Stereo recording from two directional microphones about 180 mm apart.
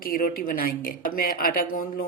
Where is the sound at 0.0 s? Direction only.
55° left (ahead or behind).